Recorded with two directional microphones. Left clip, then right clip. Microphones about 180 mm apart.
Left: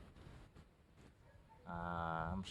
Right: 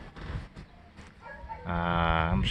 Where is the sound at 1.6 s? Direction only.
15° left (ahead or behind).